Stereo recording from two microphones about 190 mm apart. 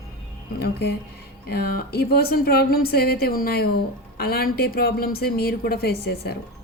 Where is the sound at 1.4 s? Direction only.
55° left (ahead or behind).